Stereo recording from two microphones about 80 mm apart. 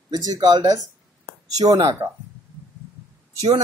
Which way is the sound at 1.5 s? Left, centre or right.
Right.